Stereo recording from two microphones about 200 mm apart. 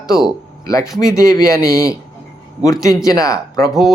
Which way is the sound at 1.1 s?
15° left (ahead or behind).